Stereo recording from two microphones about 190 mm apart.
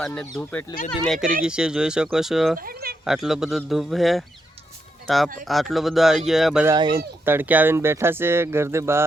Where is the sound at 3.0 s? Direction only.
Centre (ahead or behind).